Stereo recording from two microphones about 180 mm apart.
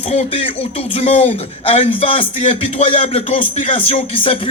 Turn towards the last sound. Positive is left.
turn(degrees=30)  # may be behind; listen again after turning